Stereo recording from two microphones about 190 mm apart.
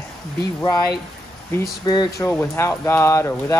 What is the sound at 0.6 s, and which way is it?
Speech, 15° left (ahead or behind).